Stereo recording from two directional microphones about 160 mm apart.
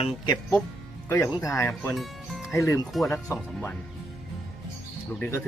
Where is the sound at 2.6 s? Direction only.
20° left (ahead or behind).